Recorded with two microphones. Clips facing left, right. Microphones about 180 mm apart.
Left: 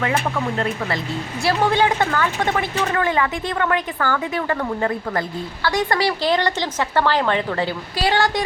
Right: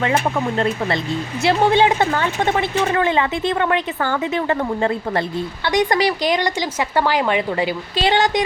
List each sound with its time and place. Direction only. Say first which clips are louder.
1.4 s a woman's voice: right 3 dB; 20° right (ahead or behind)